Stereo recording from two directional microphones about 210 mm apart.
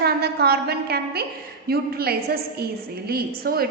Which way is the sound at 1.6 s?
45° right (ahead or behind).